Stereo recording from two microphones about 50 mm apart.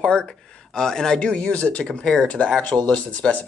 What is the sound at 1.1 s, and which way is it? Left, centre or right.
Speech, left.